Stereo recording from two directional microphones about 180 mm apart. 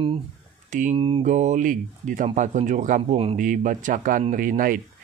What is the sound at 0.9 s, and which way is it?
Speech, 30° right (ahead or behind).